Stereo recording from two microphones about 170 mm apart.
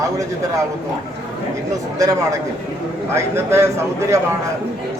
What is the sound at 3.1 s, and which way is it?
A man's voice, 15° right (ahead or behind).